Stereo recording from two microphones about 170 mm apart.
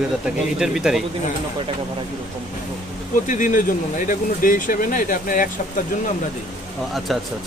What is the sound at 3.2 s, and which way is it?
Speech, 50° left (ahead or behind).